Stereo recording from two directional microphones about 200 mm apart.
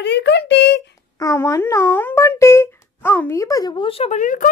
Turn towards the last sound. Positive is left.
turn(degrees=40)  # may be behind; listen again after turning